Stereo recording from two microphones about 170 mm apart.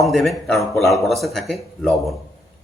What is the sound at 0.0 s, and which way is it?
Speech, centre (ahead or behind).